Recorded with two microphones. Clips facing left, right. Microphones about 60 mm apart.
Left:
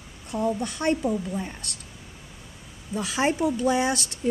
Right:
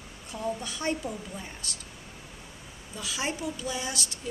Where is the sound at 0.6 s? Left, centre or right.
Left.